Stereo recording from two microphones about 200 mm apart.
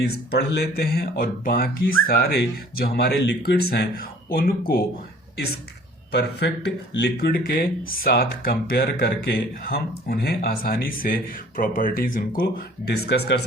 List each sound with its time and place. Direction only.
0.3 s speech: 50° left (ahead or behind)
6.1 s speech: 55° left (ahead or behind)
12.9 s speech: 60° left (ahead or behind)